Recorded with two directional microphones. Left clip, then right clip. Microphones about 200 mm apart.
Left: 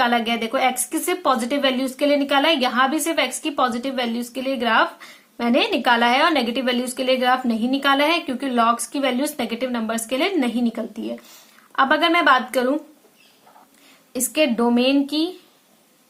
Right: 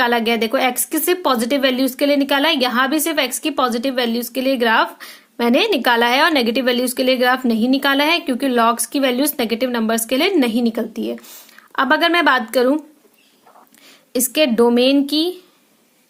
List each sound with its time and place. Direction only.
0.0 s a woman's voice: 45° right (ahead or behind)
14.1 s a woman's voice: 45° right (ahead or behind)